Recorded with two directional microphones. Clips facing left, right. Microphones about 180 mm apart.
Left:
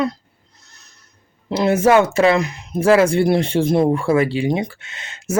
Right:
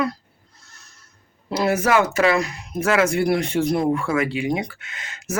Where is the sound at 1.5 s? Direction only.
25° left (ahead or behind).